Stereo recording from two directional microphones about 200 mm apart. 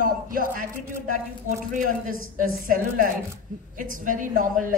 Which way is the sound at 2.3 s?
40° right (ahead or behind).